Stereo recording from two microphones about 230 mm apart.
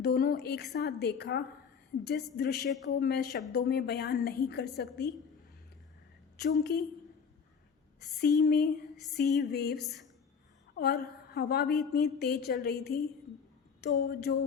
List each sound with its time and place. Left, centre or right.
0.0 s a woman's voice: left
6.3 s a woman's voice: left
8.2 s a woman's voice: left